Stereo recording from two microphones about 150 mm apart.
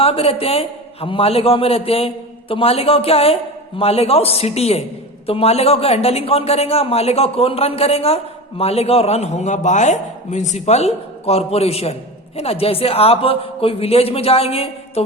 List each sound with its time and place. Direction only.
0.0 s a man's voice: 40° left (ahead or behind)